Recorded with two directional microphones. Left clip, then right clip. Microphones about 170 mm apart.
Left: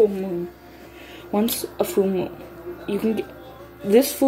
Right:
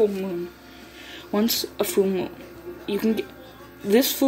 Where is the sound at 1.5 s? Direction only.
Centre (ahead or behind).